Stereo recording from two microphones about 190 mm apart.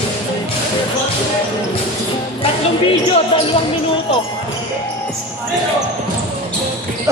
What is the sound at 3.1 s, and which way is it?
Speech, 30° left (ahead or behind).